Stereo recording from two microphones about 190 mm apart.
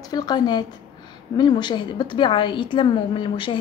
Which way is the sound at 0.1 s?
20° left (ahead or behind).